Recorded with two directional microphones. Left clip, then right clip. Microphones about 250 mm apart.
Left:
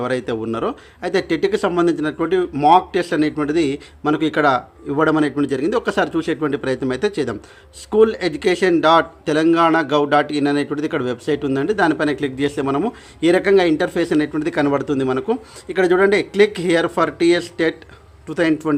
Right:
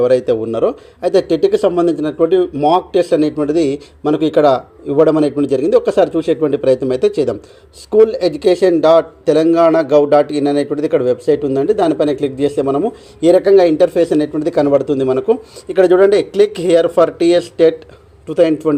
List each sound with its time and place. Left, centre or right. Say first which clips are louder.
0.0 s speech: right 9 dB; centre
13.3 s speech: right 6 dB; left
13.7 s speech: right 7 dB; centre
14.6 s speech: right 7 dB; left
14.8 s speech: right 6 dB; centre
15.7 s speech: right 5 dB; left
17.2 s speech: right 6 dB; centre